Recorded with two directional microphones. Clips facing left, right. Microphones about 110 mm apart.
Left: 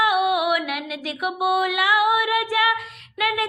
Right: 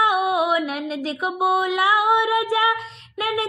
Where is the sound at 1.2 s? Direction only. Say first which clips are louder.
Even; 25° right (ahead or behind).